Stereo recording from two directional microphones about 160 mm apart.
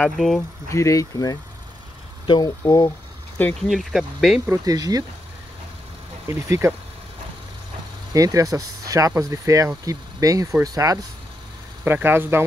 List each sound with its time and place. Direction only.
0.0 s speech: centre (ahead or behind)
0.7 s speech: 20° left (ahead or behind)
3.6 s speech: centre (ahead or behind)
4.5 s speech: 25° right (ahead or behind)
6.2 s speech: 20° right (ahead or behind)
8.1 s speech: 20° right (ahead or behind)
11.8 s speech: 10° right (ahead or behind)